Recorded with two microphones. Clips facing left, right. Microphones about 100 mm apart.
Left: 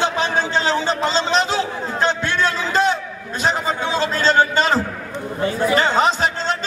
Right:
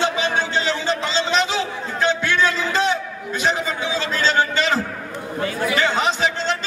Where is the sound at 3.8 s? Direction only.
45° left (ahead or behind).